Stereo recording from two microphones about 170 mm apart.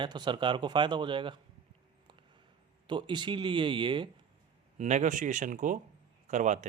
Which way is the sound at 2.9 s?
30° right (ahead or behind).